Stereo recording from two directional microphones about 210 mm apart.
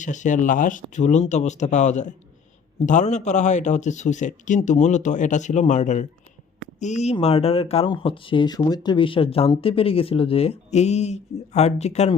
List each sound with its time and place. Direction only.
0.0 s a man's voice: 35° left (ahead or behind)